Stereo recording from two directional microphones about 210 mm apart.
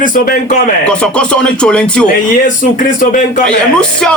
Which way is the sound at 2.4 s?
40° left (ahead or behind).